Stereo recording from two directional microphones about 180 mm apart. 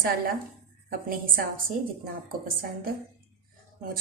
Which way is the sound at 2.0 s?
55° right (ahead or behind).